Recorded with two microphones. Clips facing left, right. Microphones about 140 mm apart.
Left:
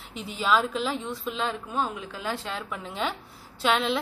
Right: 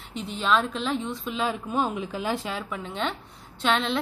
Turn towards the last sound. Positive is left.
turn(degrees=5)  # may be behind; listen again after turning